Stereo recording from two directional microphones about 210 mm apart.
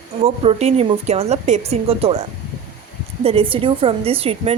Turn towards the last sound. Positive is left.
turn(degrees=-30)  # may be behind; listen again after turning